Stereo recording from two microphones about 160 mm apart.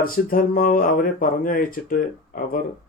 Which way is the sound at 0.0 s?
60° left (ahead or behind).